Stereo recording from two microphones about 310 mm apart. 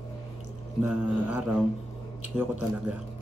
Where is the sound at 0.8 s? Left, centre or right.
Centre.